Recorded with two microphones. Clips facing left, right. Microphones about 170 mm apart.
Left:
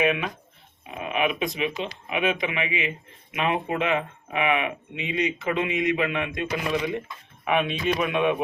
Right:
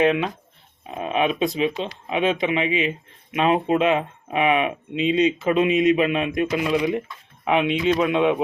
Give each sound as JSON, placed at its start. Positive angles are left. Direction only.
{"t": 0.0, "sound": "speech", "side_deg": -25}